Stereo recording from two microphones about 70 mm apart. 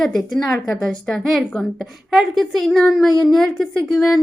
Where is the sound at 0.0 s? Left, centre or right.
Centre.